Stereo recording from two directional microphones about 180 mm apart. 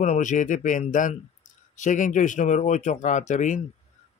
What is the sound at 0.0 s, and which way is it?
Speech, 45° left (ahead or behind).